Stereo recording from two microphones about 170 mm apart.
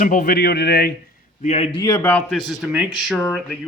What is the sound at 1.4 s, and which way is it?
Speech, 40° left (ahead or behind).